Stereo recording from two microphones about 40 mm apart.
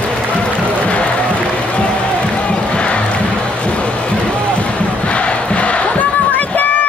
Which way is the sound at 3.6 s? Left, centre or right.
Left.